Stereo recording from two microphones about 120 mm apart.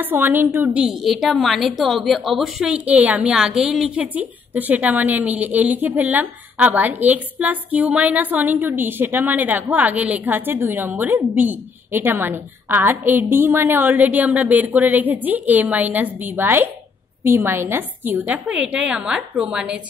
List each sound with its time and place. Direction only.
0.0 s a woman's voice: 15° right (ahead or behind)
1.0 s a woman's voice: centre (ahead or behind)